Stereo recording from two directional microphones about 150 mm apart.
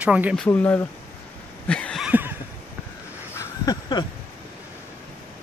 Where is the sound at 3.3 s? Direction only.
25° left (ahead or behind).